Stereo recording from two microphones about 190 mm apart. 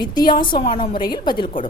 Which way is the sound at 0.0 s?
25° left (ahead or behind).